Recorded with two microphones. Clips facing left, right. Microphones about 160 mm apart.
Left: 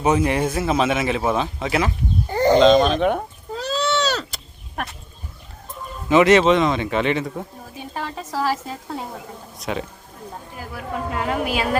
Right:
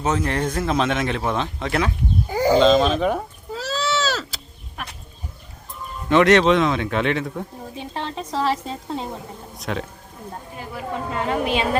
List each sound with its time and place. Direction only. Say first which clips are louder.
0.0 s a man's voice: left 3 dB; 10° left (ahead or behind)
2.2 s a sound: left 2 dB; 10° right (ahead or behind)
6.1 s a man's voice: left 1 dB; 5° left (ahead or behind)
8.6 s speech: right 2 dB; 25° right (ahead or behind)
9.6 s a man's voice: left 1 dB; centre (ahead or behind)
11.1 s a man's voice: right 1 dB; 5° left (ahead or behind)